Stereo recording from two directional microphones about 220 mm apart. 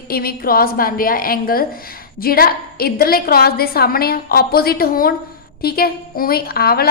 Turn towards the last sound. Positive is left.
turn(degrees=45)  # may be behind; listen again after turning